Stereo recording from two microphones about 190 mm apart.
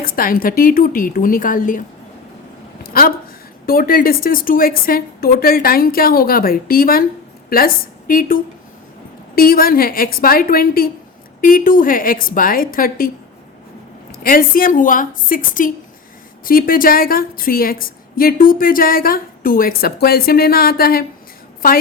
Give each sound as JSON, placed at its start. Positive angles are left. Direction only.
{"t": 0.0, "sound": "a woman's voice", "side_deg": 50}
{"t": 2.8, "sound": "a sound", "side_deg": 50}
{"t": 3.7, "sound": "a woman's voice", "side_deg": 50}
{"t": 14.1, "sound": "a woman's voice", "side_deg": 50}